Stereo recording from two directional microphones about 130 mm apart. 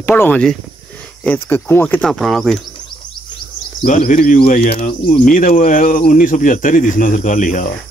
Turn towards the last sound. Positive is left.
turn(degrees=80)